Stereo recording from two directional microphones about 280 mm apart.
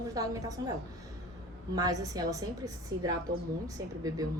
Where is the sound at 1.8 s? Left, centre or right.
Centre.